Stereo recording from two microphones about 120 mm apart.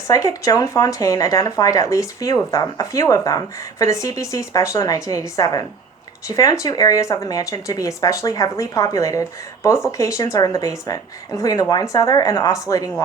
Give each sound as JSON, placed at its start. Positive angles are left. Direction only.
{"t": 0.1, "sound": "speech", "side_deg": 25}